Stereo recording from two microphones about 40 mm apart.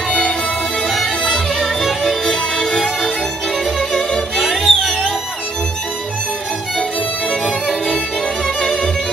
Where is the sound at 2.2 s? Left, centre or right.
Centre.